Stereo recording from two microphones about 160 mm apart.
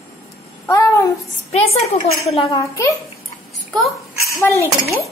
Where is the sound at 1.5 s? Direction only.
40° left (ahead or behind).